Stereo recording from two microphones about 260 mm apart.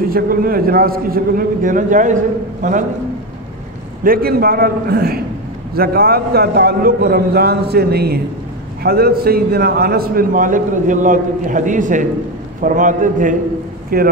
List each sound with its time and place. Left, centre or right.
0.1 s a man's voice: right
4.0 s a man's voice: right